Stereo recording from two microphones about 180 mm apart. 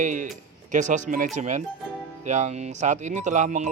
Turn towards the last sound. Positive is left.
turn(degrees=-40)  # may be behind; listen again after turning